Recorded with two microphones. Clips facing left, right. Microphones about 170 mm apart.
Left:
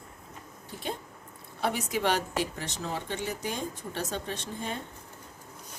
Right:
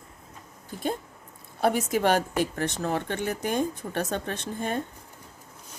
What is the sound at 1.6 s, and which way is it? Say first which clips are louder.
Speech: right 5 dB; 45° right (ahead or behind).